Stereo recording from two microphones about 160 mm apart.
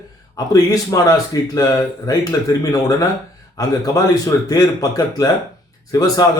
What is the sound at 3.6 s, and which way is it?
A man's voice, 20° left (ahead or behind).